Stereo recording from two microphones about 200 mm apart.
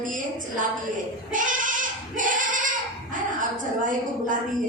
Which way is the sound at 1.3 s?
40° right (ahead or behind).